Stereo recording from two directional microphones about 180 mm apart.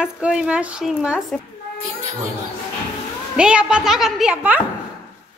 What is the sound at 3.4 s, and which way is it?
Speech, 5° right (ahead or behind).